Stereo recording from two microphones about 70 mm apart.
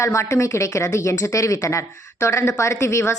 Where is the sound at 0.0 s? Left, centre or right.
Left.